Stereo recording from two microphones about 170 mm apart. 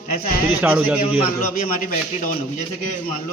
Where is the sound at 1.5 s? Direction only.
55° left (ahead or behind).